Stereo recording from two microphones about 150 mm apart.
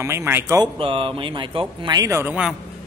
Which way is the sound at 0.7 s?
35° right (ahead or behind).